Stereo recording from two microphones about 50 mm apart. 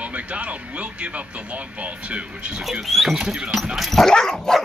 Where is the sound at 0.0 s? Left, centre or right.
Right.